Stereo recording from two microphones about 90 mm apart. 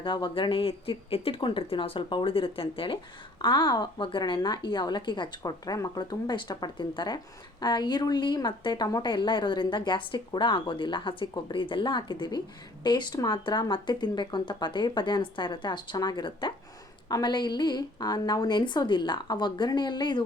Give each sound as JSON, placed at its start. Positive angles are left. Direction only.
{"t": 0.0, "sound": "speech", "side_deg": 65}
{"t": 5.4, "sound": "speech", "side_deg": 45}
{"t": 13.1, "sound": "speech", "side_deg": 45}